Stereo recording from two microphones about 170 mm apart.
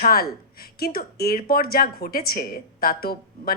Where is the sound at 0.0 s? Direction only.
60° left (ahead or behind).